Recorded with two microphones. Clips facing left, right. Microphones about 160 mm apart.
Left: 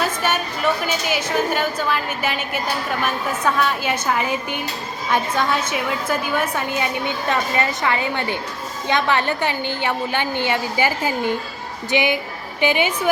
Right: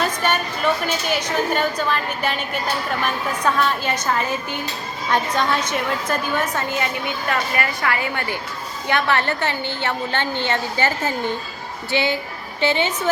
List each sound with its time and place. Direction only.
0.9 s a woman's voice: 5° left (ahead or behind)